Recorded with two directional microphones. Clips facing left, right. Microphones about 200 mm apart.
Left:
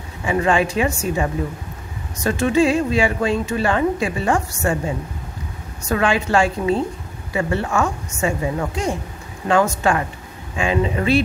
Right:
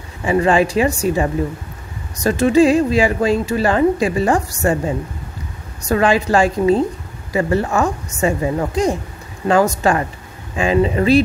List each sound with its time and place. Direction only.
0.2 s speech: 35° right (ahead or behind)
2.2 s speech: 35° right (ahead or behind)